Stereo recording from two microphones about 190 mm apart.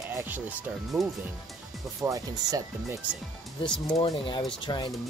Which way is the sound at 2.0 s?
20° right (ahead or behind).